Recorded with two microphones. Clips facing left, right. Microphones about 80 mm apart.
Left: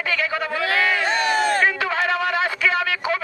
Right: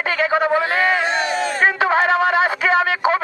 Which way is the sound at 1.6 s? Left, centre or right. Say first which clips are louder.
Right 5 dB; right.